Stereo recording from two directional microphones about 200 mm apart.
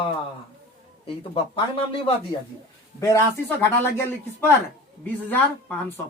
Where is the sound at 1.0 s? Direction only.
25° left (ahead or behind).